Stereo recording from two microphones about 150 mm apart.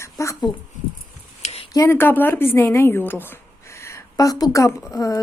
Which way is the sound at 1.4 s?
40° left (ahead or behind).